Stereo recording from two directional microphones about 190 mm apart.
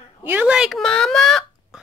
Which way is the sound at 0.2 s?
10° right (ahead or behind).